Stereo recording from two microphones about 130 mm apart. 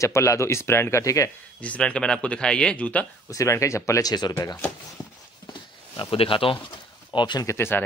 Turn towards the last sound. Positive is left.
turn(degrees=20)  # may be behind; listen again after turning